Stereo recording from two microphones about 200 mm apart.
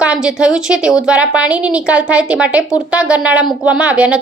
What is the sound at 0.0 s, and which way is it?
A woman's voice, 5° right (ahead or behind).